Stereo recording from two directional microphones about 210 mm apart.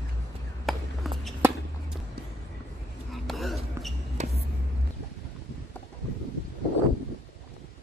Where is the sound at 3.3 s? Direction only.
Centre (ahead or behind).